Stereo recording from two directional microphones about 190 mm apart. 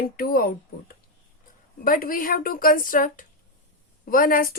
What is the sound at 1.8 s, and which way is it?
Speech, 50° left (ahead or behind).